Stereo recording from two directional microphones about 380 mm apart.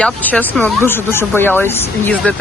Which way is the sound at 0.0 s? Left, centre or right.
Centre.